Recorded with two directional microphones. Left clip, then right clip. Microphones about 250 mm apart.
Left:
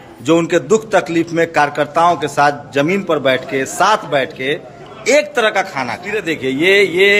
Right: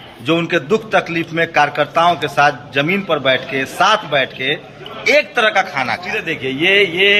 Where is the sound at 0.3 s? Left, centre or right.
Centre.